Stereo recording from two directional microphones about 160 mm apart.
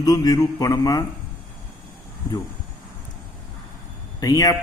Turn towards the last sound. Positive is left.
turn(degrees=25)  # may be behind; listen again after turning